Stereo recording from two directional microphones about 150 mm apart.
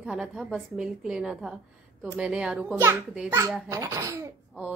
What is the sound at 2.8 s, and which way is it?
A child's voice, 15° right (ahead or behind).